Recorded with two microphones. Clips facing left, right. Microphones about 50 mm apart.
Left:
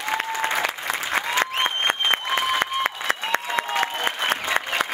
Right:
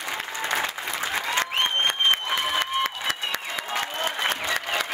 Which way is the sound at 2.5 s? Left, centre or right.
Left.